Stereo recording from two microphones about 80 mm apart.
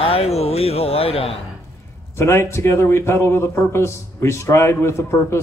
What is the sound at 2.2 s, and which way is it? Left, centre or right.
A man's voice, left.